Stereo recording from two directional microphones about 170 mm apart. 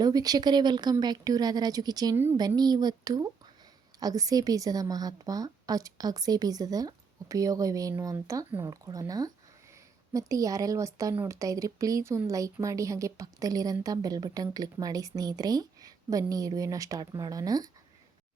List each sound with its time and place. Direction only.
0.0 s speech: 20° right (ahead or behind)